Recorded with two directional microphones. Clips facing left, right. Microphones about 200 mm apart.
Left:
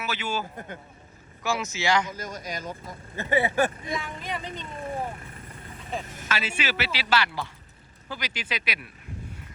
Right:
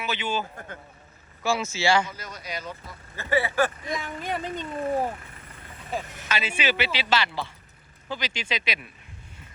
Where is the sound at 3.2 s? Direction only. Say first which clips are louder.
Even; 20° left (ahead or behind).